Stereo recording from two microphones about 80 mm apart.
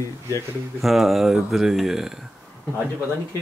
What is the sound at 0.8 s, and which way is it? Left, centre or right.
Speech, centre.